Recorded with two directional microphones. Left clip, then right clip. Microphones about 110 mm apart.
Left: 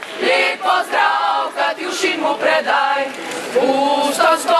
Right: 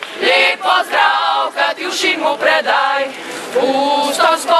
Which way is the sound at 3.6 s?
15° right (ahead or behind).